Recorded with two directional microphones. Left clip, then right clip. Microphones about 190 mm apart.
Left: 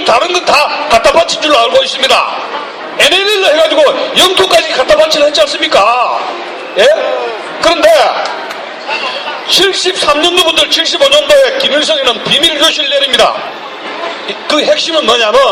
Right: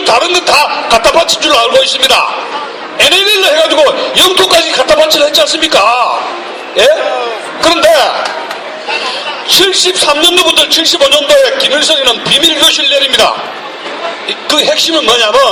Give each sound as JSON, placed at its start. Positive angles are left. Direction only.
{"t": 0.0, "sound": "a man's voice", "side_deg": -50}
{"t": 7.6, "sound": "a man's voice", "side_deg": -50}
{"t": 9.5, "sound": "a man's voice", "side_deg": -50}
{"t": 14.4, "sound": "a man's voice", "side_deg": -55}